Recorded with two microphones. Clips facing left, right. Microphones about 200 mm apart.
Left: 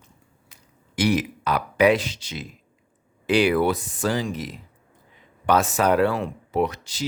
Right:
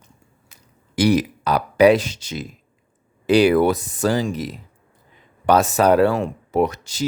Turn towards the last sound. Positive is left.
turn(degrees=-45)  # may be behind; listen again after turning